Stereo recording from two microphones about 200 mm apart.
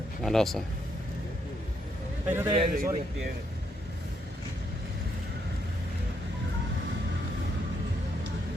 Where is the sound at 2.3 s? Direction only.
10° right (ahead or behind).